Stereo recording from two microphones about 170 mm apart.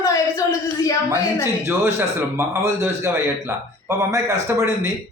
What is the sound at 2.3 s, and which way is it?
A man's voice, 15° right (ahead or behind).